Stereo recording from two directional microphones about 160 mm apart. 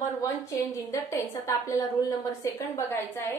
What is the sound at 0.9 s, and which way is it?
A woman's voice, 20° left (ahead or behind).